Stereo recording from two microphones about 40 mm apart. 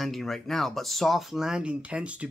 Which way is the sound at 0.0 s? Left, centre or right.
Centre.